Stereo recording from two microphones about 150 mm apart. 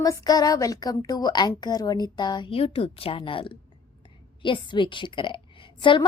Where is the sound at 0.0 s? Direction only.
25° left (ahead or behind).